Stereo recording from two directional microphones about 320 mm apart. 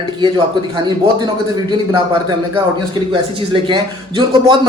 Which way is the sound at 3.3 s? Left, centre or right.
Centre.